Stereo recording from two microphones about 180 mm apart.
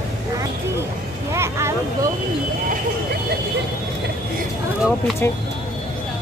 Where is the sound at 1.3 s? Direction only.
15° right (ahead or behind).